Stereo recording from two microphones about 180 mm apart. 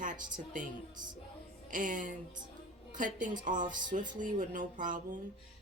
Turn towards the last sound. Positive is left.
turn(degrees=-45)  # may be behind; listen again after turning